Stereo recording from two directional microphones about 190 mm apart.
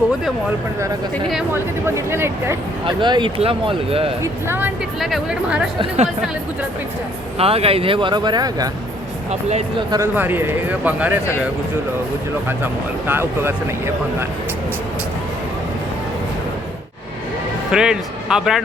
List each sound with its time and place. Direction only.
1.1 s speech: centre (ahead or behind)
1.5 s speech: 10° right (ahead or behind)
2.8 s speech: 25° right (ahead or behind)
4.2 s speech: 10° right (ahead or behind)
7.3 s speech: 30° right (ahead or behind)
9.3 s speech: 35° right (ahead or behind)
9.9 s speech: 10° right (ahead or behind)
12.5 s speech: 10° right (ahead or behind)
17.7 s speech: 5° right (ahead or behind)